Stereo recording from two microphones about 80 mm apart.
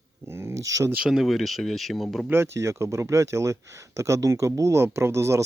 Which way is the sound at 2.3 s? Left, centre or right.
Right.